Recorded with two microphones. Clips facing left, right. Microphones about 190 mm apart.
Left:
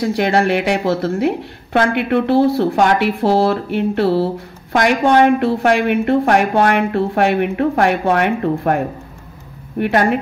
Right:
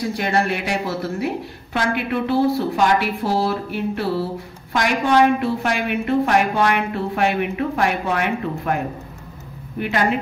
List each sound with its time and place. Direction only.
0.0 s a woman's voice: 70° left (ahead or behind); by 10.1 s 55° left (ahead or behind)